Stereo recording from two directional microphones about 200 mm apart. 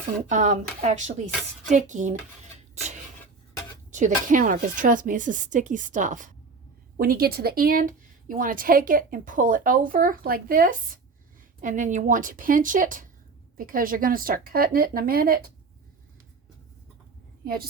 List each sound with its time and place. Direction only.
0.3 s speech: 40° right (ahead or behind)
3.9 s a woman's voice: 40° right (ahead or behind)
17.4 s a woman's voice: 50° right (ahead or behind)